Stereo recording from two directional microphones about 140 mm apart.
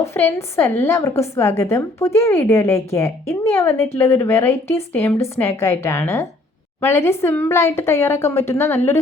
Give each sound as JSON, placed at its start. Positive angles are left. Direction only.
{"t": 0.0, "sound": "a woman's voice", "side_deg": 15}